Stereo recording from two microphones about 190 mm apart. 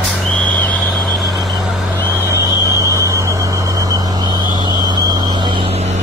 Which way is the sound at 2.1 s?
15° right (ahead or behind).